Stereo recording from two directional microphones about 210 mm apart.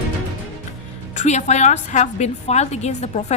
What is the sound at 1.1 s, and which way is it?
A woman's voice, 35° left (ahead or behind).